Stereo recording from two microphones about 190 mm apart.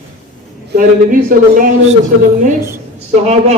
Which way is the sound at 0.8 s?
45° right (ahead or behind).